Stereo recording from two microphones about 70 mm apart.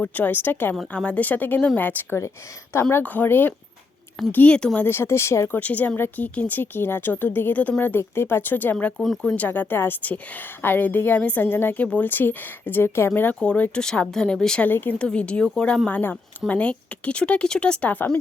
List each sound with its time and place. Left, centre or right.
0.0 s a woman's voice: left
0.9 s a woman's voice: centre
4.9 s speech: left
5.5 s a woman's voice: left
13.4 s speech: centre
14.7 s a woman's voice: left
14.9 s speech: centre
15.9 s a woman's voice: left